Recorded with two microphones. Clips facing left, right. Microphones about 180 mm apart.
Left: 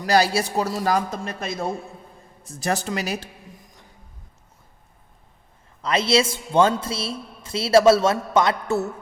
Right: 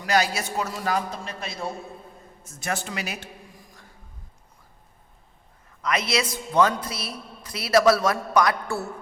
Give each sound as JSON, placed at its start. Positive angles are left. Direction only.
{"t": 0.0, "sound": "a man's voice", "side_deg": 35}
{"t": 2.4, "sound": "a man's voice", "side_deg": 35}
{"t": 3.6, "sound": "a sound", "side_deg": 20}
{"t": 5.8, "sound": "a man's voice", "side_deg": 30}